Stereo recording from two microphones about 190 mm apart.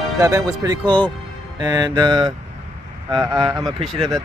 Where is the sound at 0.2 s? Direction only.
15° right (ahead or behind).